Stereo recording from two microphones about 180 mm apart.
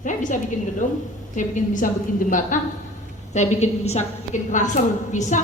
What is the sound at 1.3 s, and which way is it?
A woman's voice, 45° left (ahead or behind).